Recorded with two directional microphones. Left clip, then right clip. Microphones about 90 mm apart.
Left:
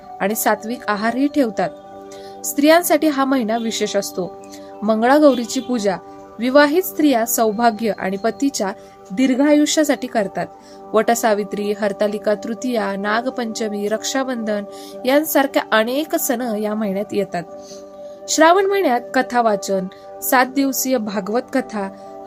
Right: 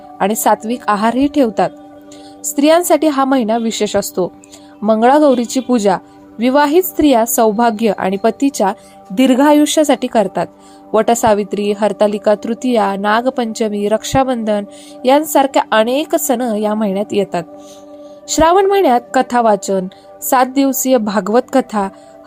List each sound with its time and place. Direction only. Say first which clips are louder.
0.2 s a woman's voice: right 5 dB; 35° right (ahead or behind)